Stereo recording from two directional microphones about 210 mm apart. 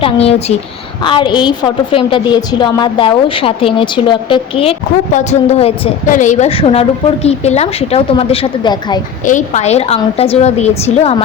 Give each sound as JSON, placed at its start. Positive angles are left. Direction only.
{"t": 0.0, "sound": "a woman's voice", "side_deg": 30}
{"t": 9.2, "sound": "a woman's voice", "side_deg": 35}